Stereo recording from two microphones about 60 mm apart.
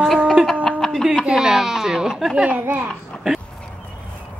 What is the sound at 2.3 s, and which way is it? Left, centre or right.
Speech, centre.